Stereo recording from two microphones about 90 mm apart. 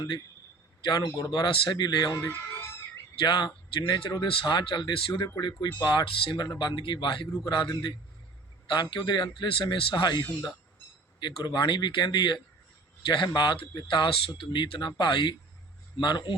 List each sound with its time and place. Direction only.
1.1 s speech: 50° left (ahead or behind)
1.5 s speech: 60° left (ahead or behind)
3.2 s speech: 60° left (ahead or behind)
5.4 s speech: 60° left (ahead or behind)